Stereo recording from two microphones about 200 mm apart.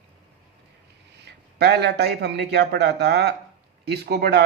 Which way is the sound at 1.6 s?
55° right (ahead or behind).